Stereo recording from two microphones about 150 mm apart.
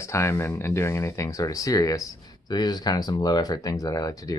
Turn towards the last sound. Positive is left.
turn(degrees=25)  # may be behind; listen again after turning